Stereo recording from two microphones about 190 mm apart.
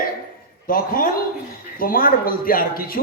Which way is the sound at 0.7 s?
50° left (ahead or behind).